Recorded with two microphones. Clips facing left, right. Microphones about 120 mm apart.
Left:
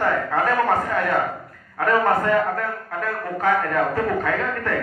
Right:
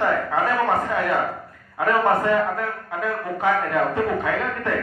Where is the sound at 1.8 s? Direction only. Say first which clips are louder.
Even; 5° right (ahead or behind).